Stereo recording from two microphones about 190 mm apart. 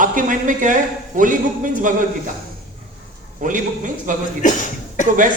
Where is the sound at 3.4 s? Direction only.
45° right (ahead or behind).